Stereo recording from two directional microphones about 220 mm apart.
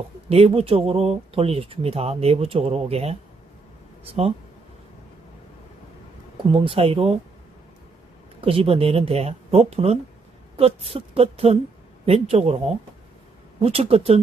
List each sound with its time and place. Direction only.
0.3 s speech: 25° right (ahead or behind)
6.5 s speech: 25° right (ahead or behind)
8.4 s speech: 25° right (ahead or behind)